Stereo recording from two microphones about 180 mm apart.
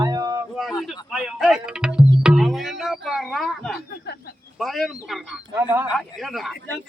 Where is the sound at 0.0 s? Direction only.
20° right (ahead or behind).